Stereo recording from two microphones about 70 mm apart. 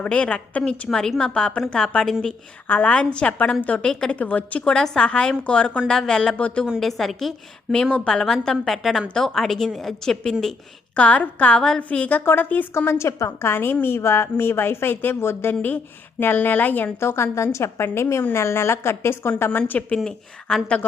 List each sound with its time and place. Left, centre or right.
0.0 s a woman's voice: centre
2.6 s a woman's voice: left
4.2 s a woman's voice: left
6.7 s a woman's voice: centre
10.9 s a woman's voice: centre
12.7 s a woman's voice: left
19.5 s a woman's voice: left
20.5 s a woman's voice: centre